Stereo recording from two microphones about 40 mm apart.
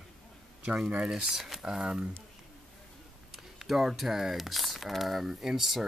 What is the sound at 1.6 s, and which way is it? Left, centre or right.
Speech, right.